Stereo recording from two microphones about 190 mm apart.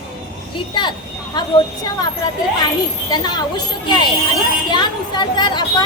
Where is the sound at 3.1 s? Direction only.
20° left (ahead or behind).